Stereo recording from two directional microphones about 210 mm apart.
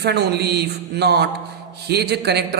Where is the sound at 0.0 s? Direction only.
50° right (ahead or behind).